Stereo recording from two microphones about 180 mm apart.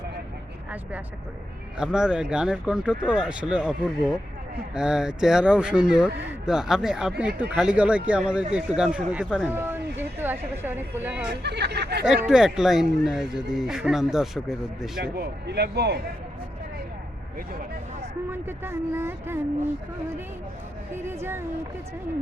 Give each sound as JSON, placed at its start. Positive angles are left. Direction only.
{"t": 0.7, "sound": "speech", "side_deg": -10}
{"t": 11.4, "sound": "speech", "side_deg": -70}
{"t": 12.5, "sound": "speech", "side_deg": -5}
{"t": 15.0, "sound": "speech", "side_deg": -65}
{"t": 18.3, "sound": "speech", "side_deg": -10}
{"t": 20.9, "sound": "speech", "side_deg": -15}